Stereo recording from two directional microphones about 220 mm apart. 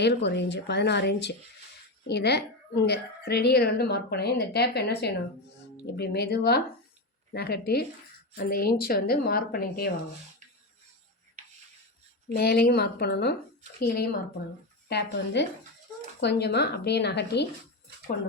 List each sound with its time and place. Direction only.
0.0 s a woman's voice: 50° left (ahead or behind)
12.3 s a woman's voice: 45° left (ahead or behind)